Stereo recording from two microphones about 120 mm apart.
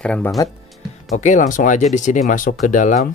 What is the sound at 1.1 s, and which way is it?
Speech, 85° left.